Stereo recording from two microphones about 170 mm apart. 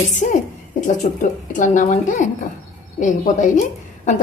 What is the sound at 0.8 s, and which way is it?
Speech, 50° left (ahead or behind).